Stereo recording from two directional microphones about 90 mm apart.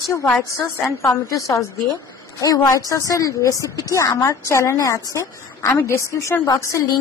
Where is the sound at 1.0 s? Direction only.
40° left (ahead or behind).